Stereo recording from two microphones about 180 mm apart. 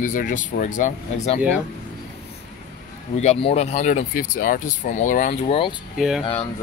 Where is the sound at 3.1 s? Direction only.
35° left (ahead or behind).